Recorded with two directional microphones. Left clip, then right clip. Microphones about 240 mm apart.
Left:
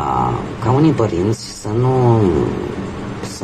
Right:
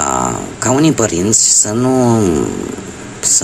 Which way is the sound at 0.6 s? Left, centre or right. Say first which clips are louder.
Right 3 dB; right.